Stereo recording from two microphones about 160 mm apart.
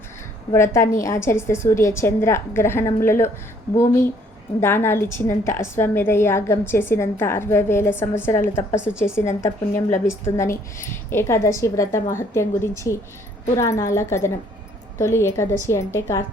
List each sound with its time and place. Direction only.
0.5 s a woman's voice: 15° left (ahead or behind)
4.6 s a woman's voice: 15° left (ahead or behind)